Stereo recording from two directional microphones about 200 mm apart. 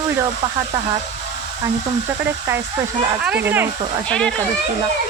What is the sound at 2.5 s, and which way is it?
Speech, 15° right (ahead or behind).